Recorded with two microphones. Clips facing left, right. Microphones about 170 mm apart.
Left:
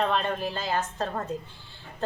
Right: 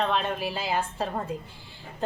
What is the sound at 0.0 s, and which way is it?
A woman's voice, centre (ahead or behind).